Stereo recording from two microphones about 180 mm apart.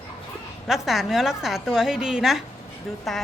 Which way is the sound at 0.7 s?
Centre (ahead or behind).